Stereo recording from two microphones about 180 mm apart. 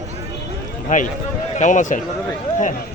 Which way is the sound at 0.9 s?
45° left (ahead or behind).